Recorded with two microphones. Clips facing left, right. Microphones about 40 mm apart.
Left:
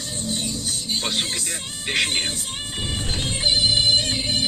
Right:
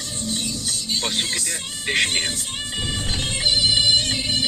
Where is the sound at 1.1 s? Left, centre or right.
Left.